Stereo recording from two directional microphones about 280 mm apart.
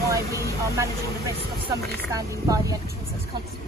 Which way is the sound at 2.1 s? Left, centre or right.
Centre.